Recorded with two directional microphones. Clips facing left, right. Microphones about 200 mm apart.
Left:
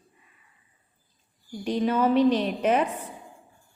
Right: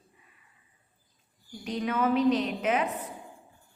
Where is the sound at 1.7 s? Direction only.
30° left (ahead or behind).